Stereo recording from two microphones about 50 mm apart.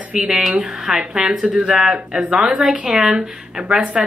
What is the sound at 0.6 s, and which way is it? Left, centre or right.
Speech, centre.